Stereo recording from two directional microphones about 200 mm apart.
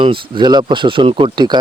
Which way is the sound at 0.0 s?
25° right (ahead or behind).